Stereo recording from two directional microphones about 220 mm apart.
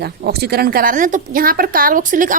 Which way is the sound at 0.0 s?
45° right (ahead or behind).